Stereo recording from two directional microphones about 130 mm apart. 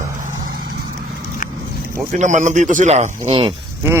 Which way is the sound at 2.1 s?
65° right (ahead or behind).